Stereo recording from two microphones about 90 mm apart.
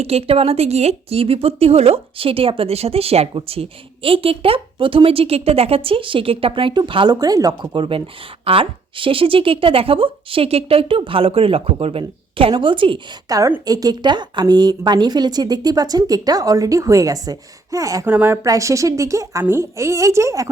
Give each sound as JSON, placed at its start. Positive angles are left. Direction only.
{"t": 0.2, "sound": "speech", "side_deg": -90}
{"t": 7.2, "sound": "speech", "side_deg": -45}
{"t": 13.2, "sound": "a woman's voice", "side_deg": -40}
{"t": 18.0, "sound": "a woman's voice", "side_deg": -20}
{"t": 18.4, "sound": "a woman's voice", "side_deg": -35}